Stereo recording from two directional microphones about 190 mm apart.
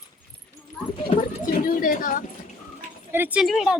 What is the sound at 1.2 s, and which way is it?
Speech, 45° left (ahead or behind).